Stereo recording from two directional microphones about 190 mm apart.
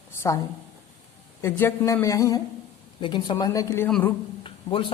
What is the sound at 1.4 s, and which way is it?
Speech, 15° left (ahead or behind).